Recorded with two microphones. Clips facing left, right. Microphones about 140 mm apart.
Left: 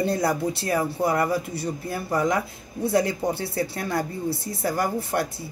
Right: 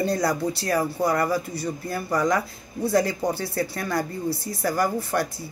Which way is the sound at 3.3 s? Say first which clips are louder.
Even; 25° left (ahead or behind).